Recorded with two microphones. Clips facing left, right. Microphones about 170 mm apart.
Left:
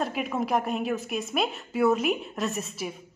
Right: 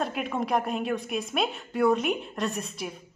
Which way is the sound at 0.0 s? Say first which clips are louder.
Left 1 dB; centre (ahead or behind).